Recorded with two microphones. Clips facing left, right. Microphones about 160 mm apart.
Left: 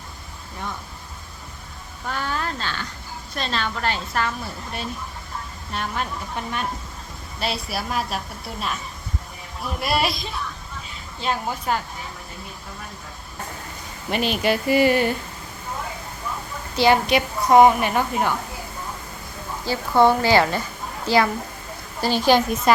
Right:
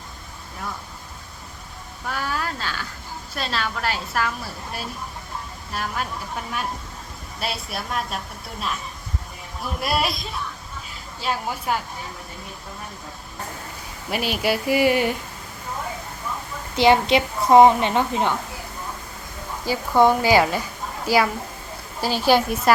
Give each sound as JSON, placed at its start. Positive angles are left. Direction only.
{"t": 2.0, "sound": "a woman's voice", "side_deg": -5}
{"t": 9.6, "sound": "a woman's voice", "side_deg": 0}
{"t": 14.1, "sound": "speech", "side_deg": -5}
{"t": 16.7, "sound": "a woman's voice", "side_deg": -20}
{"t": 19.7, "sound": "speech", "side_deg": -15}